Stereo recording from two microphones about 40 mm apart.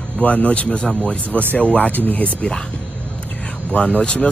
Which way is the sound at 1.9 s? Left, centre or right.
Left.